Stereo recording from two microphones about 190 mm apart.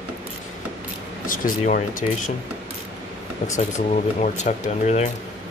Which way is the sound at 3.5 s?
35° left (ahead or behind).